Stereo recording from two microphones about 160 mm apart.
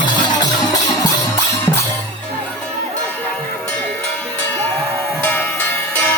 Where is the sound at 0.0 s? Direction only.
25° left (ahead or behind).